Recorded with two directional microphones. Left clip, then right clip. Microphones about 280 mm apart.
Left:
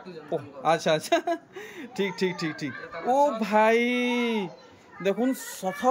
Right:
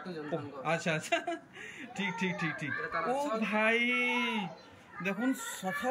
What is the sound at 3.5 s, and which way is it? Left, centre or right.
Speech, centre.